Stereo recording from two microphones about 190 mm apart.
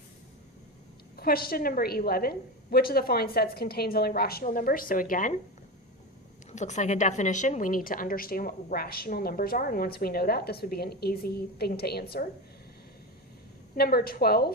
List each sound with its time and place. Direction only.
1.1 s a woman's voice: 50° left (ahead or behind)
6.5 s a woman's voice: 40° left (ahead or behind); by 12.0 s 55° left (ahead or behind)
13.7 s a woman's voice: 50° left (ahead or behind)